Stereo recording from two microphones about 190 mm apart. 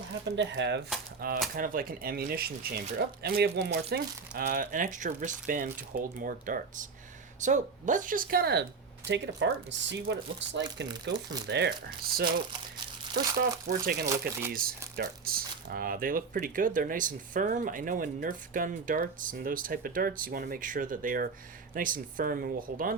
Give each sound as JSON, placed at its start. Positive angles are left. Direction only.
{"t": 0.3, "sound": "speech", "side_deg": -70}
{"t": 1.2, "sound": "speech", "side_deg": -50}
{"t": 9.0, "sound": "speech", "side_deg": -70}
{"t": 11.1, "sound": "speech", "side_deg": -20}
{"t": 11.4, "sound": "speech", "side_deg": -65}
{"t": 13.4, "sound": "speech", "side_deg": -50}
{"t": 14.1, "sound": "speech", "side_deg": -15}
{"t": 14.5, "sound": "speech", "side_deg": -50}